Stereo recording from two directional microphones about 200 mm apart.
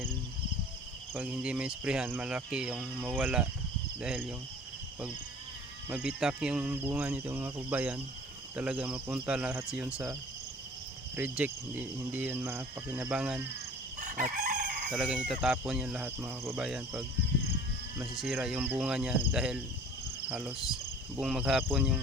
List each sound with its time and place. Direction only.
1.1 s speech: 5° right (ahead or behind)
5.9 s speech: 5° right (ahead or behind)
11.2 s speech: 10° right (ahead or behind)
14.0 s chicken: 40° right (ahead or behind)
14.8 s speech: 5° right (ahead or behind)
18.2 s speech: centre (ahead or behind)